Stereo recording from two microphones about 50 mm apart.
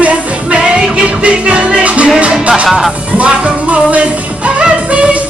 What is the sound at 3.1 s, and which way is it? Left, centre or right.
Music, right.